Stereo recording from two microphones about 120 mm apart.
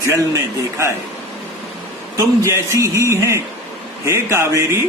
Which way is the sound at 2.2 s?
25° right (ahead or behind).